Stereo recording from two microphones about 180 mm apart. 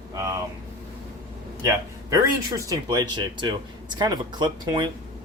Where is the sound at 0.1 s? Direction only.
15° right (ahead or behind).